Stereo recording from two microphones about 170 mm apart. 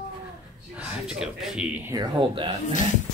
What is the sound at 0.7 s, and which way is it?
A man's voice, 5° right (ahead or behind).